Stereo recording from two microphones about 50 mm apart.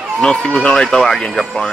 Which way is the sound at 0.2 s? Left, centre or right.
Centre.